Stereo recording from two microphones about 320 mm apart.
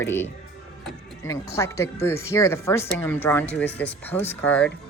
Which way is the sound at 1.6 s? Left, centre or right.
Centre.